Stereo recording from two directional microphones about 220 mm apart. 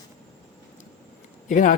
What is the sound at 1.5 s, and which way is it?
Speech, 35° left (ahead or behind).